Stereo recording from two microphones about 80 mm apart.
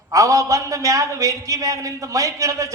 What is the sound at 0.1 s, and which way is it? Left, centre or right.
A man's voice, right.